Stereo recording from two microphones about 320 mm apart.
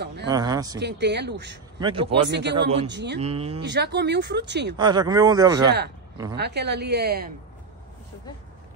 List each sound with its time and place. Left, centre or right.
0.0 s speech: right
0.3 s speech: centre
0.7 s speech: right
1.8 s speech: centre
2.2 s speech: right
3.2 s speech: centre
3.6 s speech: right
4.7 s speech: centre
6.3 s speech: right